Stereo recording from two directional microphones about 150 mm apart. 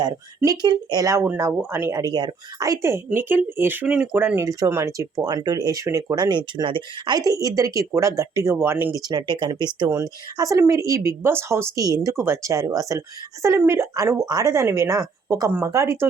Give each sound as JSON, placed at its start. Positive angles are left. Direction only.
{"t": 0.3, "sound": "a woman's voice", "side_deg": -25}
{"t": 9.0, "sound": "a woman's voice", "side_deg": -30}